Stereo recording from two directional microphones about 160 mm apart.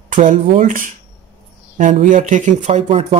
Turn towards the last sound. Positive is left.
turn(degrees=-40)  # may be behind; listen again after turning